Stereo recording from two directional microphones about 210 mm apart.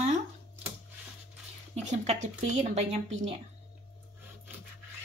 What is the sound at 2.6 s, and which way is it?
Speech, 30° right (ahead or behind).